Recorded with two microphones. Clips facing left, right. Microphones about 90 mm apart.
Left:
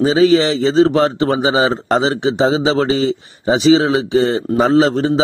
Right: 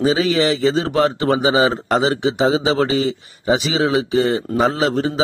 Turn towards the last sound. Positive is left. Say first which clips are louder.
# left 6 dB
turn(degrees=30)  # may be behind; listen again after turning